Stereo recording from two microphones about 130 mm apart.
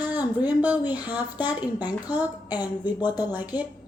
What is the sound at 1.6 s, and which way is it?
A woman's voice, 30° left (ahead or behind).